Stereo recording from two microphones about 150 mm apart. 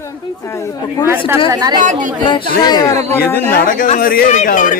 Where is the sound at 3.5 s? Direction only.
70° left (ahead or behind).